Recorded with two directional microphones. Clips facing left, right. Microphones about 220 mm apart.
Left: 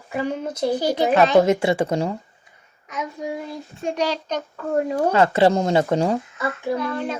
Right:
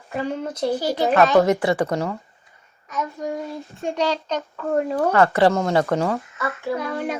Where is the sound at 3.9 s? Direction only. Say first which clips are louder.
Right 1 dB; 15° left (ahead or behind).